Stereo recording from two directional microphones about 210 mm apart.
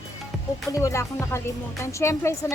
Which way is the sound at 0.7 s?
15° left (ahead or behind).